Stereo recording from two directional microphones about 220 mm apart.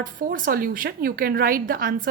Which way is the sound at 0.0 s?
40° right (ahead or behind).